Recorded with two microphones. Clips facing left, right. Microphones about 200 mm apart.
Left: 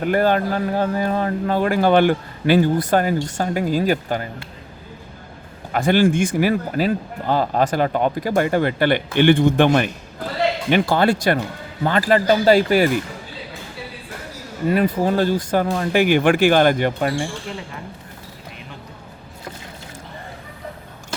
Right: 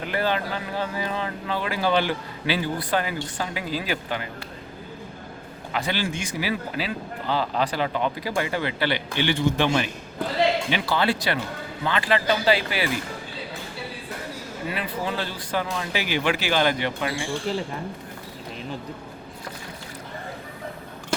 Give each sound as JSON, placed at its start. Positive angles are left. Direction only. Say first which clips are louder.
{"t": 0.0, "sound": "speech", "louder": "left 8 dB", "side_deg": 50}
{"t": 5.7, "sound": "speech", "louder": "left 11 dB", "side_deg": 50}
{"t": 14.7, "sound": "speech", "louder": "left 12 dB", "side_deg": 45}